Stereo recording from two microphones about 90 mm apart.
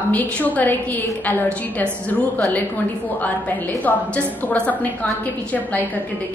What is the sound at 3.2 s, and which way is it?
A woman's voice, 20° left (ahead or behind).